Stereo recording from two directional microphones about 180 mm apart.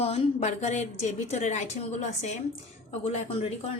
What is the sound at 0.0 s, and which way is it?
A woman's voice, 35° left (ahead or behind).